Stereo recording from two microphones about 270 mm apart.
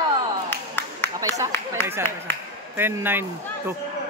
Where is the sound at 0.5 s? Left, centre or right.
Centre.